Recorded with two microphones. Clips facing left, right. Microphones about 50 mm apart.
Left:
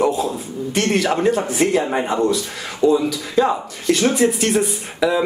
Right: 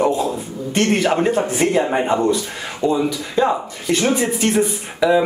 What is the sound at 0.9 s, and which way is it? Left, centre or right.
Speech, centre.